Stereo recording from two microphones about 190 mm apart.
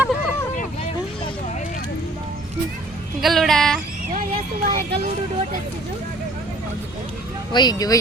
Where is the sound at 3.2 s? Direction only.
Centre (ahead or behind).